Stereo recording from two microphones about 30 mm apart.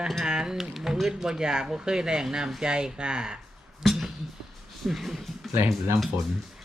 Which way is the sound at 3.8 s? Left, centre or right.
Centre.